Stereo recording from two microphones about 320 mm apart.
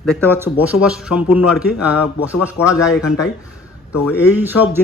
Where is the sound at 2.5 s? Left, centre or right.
Centre.